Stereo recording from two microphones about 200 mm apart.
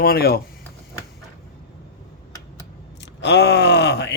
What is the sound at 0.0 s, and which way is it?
Speech, 50° left (ahead or behind).